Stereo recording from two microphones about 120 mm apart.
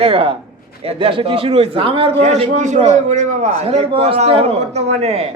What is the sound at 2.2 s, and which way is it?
A man's voice, 70° right (ahead or behind).